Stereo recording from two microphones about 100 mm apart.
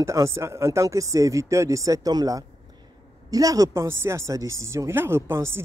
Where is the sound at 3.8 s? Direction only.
25° right (ahead or behind).